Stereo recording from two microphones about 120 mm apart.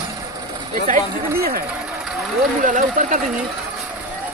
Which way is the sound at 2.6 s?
90° right.